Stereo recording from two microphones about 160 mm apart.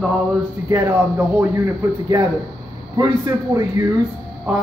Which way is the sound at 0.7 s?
15° right (ahead or behind).